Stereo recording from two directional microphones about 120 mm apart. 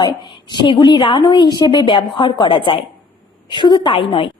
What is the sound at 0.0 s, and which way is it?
A woman's voice, 40° left (ahead or behind).